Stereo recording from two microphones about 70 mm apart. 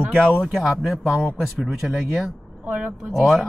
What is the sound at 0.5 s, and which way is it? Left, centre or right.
Speech, centre.